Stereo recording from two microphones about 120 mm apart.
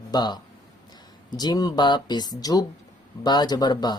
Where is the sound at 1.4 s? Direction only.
35° left (ahead or behind).